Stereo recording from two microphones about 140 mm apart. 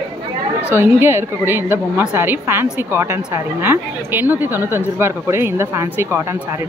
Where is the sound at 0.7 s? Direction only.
15° right (ahead or behind).